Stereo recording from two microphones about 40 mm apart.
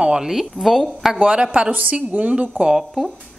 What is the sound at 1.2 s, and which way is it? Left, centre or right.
A woman's voice, right.